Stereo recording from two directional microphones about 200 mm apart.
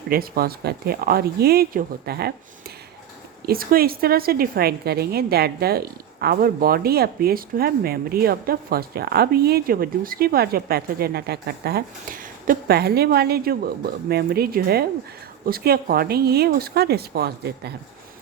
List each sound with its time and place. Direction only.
0.1 s speech: 50° right (ahead or behind)